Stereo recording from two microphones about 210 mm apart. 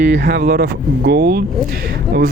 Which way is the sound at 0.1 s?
50° right (ahead or behind).